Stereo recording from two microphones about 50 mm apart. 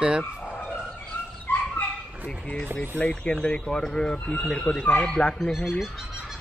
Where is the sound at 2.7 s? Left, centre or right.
Left.